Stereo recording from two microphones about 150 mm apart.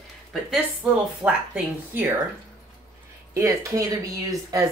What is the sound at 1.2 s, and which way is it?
Speech, 10° right (ahead or behind).